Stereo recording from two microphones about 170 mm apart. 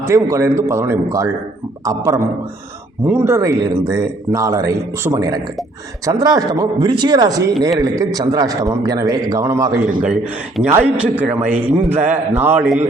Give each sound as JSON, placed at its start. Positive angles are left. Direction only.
{"t": 0.0, "sound": "a man's voice", "side_deg": -15}